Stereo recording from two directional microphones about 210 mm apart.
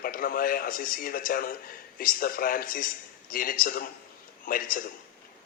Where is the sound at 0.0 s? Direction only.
45° left (ahead or behind).